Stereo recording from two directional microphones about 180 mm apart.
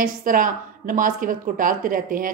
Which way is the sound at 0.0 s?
50° right (ahead or behind).